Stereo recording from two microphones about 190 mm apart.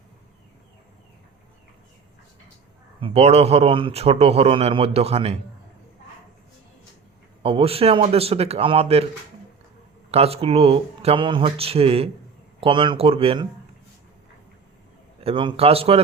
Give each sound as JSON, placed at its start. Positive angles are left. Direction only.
{"t": 3.0, "sound": "a man's voice", "side_deg": -35}
{"t": 7.4, "sound": "a man's voice", "side_deg": -30}
{"t": 10.1, "sound": "a man's voice", "side_deg": -30}
{"t": 15.2, "sound": "a man's voice", "side_deg": -30}